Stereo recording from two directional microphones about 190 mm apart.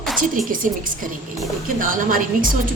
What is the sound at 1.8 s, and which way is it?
Speech, 45° right (ahead or behind).